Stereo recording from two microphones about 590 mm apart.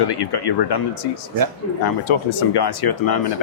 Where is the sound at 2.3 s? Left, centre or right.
Left.